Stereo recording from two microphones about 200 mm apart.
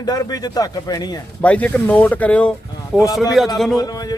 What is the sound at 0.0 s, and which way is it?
Speech, 20° left (ahead or behind).